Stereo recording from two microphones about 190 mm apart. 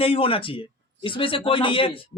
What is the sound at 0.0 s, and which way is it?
A man's voice, 30° left (ahead or behind).